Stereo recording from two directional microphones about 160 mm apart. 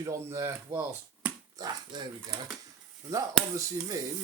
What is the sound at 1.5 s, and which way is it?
Speech, 25° right (ahead or behind).